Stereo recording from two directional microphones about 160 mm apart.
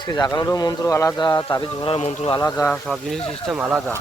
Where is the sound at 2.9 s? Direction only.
Centre (ahead or behind).